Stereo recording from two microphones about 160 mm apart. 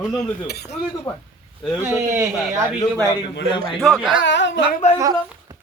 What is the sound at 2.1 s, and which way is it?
Speech, 20° right (ahead or behind).